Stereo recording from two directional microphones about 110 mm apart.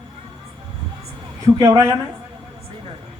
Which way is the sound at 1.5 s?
35° right (ahead or behind).